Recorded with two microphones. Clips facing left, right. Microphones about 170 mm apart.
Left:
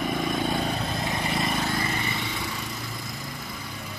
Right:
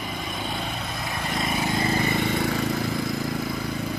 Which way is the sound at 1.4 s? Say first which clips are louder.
Right 4 dB; 5° right (ahead or behind).